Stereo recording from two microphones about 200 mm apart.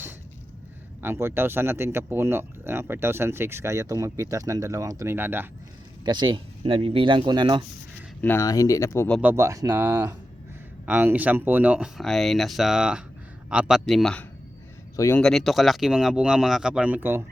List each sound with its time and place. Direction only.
1.0 s speech: 10° right (ahead or behind)
6.1 s speech: 25° right (ahead or behind)
8.2 s speech: 15° left (ahead or behind)
9.2 s speech: 15° right (ahead or behind); by 14.3 s 5° left (ahead or behind)
14.9 s speech: 15° left (ahead or behind)
15.2 s speech: centre (ahead or behind)